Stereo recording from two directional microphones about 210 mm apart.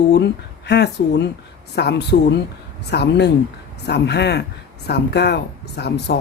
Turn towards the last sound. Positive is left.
turn(degrees=55)  # may be behind; listen again after turning